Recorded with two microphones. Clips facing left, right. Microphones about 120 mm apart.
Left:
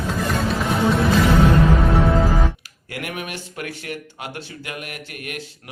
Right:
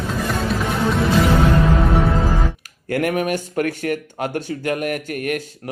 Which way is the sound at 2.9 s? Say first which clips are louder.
Right 11 dB; 40° right (ahead or behind).